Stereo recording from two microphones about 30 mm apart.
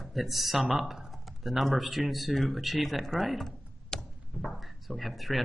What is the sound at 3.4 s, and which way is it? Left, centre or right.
Computer keyboard, left.